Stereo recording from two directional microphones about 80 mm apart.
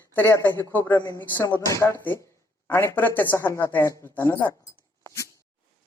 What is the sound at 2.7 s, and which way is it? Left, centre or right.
Speech, left.